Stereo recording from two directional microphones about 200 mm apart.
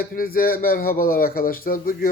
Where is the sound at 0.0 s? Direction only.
45° left (ahead or behind).